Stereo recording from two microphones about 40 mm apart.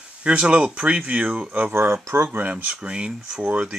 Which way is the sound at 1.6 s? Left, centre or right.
Right.